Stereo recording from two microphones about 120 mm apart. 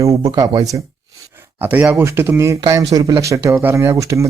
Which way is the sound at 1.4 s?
15° right (ahead or behind).